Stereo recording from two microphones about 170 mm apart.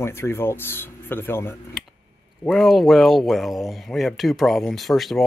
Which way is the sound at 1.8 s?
Centre (ahead or behind).